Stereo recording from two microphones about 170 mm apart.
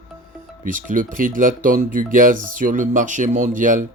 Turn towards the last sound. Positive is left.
turn(degrees=-50)  # may be behind; listen again after turning